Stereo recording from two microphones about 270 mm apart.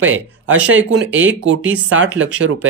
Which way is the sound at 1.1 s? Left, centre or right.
Centre.